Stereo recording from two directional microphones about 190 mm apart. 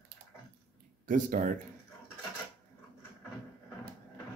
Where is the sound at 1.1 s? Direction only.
45° right (ahead or behind).